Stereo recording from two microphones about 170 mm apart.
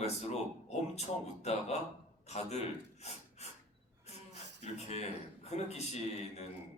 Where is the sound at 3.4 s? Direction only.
40° left (ahead or behind).